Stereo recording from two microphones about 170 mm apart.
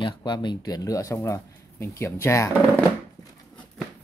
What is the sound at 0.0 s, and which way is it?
Speech, 25° left (ahead or behind).